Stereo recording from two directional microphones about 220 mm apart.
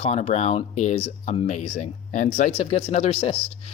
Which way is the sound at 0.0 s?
30° left (ahead or behind).